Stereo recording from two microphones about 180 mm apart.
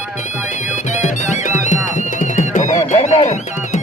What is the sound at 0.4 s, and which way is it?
Music, 45° left (ahead or behind).